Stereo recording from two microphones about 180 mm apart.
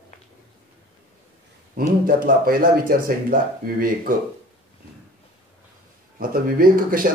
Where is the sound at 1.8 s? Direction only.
50° right (ahead or behind).